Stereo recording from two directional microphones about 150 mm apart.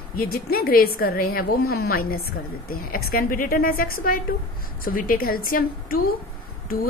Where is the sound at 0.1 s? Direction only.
85° left.